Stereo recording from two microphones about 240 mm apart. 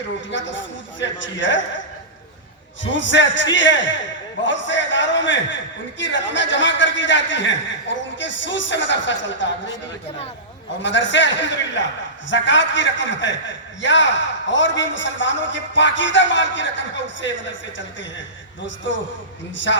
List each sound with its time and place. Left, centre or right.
0.3 s a man's voice: left
3.1 s a man's voice: left
10.8 s a man's voice: left